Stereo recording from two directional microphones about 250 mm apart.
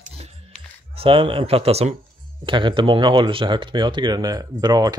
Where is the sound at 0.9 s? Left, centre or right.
Right.